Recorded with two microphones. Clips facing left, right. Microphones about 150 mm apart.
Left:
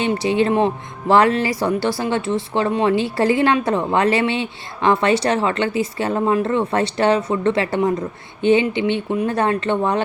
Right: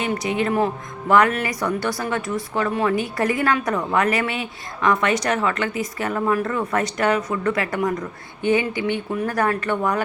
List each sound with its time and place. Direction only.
0.0 s speech: 30° left (ahead or behind)